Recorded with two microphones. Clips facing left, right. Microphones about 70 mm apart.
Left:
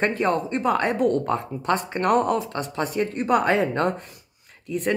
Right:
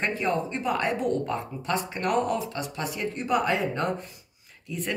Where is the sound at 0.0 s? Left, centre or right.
Left.